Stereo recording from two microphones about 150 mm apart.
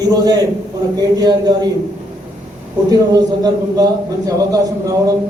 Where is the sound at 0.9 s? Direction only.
25° right (ahead or behind).